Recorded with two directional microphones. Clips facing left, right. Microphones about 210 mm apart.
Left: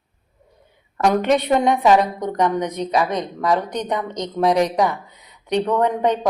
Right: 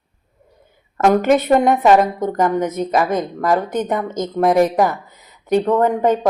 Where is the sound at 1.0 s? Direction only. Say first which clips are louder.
Right 3 dB; 5° right (ahead or behind).